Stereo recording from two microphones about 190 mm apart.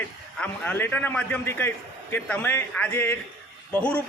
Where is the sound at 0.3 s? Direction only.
10° left (ahead or behind).